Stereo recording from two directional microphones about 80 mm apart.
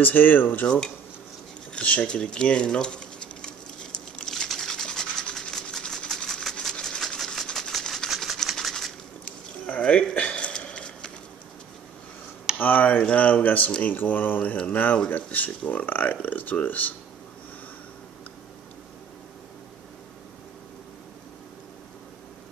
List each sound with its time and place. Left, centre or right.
0.0 s speech: left
0.7 s speech: centre
3.4 s scratch: centre
8.1 s a sound: centre
9.7 s a sound: centre
12.5 s speech: left